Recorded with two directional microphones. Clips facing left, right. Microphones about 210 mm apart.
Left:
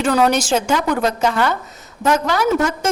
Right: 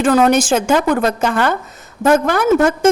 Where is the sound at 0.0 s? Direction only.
50° right (ahead or behind).